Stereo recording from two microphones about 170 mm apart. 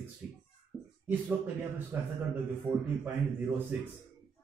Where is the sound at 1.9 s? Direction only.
10° right (ahead or behind).